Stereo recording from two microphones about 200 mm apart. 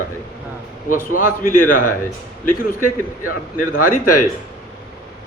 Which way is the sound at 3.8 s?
45° left (ahead or behind).